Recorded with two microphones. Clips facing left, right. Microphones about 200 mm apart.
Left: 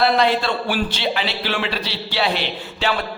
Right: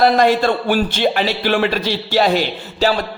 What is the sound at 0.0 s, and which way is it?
A man's voice, 45° right (ahead or behind).